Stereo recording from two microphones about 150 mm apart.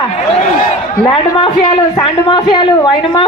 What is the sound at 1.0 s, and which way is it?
Speech, 35° left (ahead or behind).